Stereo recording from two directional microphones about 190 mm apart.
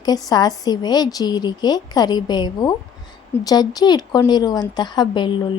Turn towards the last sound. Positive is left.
turn(degrees=25)  # may be behind; listen again after turning